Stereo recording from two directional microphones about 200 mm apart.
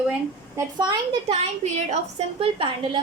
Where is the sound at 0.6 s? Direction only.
20° right (ahead or behind).